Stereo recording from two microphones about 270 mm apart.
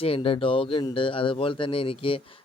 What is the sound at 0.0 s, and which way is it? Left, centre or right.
A man's voice, left.